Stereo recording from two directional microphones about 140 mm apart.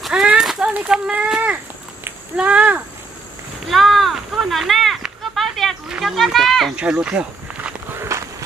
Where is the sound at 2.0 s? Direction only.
10° right (ahead or behind).